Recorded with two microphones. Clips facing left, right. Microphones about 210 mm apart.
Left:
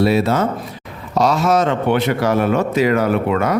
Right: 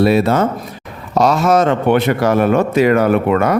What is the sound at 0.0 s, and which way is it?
A man's voice, 55° right (ahead or behind).